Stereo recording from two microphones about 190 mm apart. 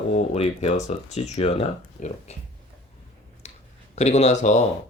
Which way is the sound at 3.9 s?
35° left (ahead or behind).